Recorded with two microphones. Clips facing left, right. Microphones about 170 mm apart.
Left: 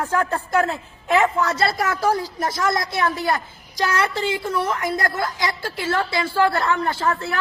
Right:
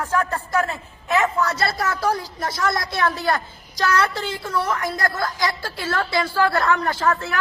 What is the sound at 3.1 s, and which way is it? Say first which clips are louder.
A woman's voice: even; 15° left (ahead or behind).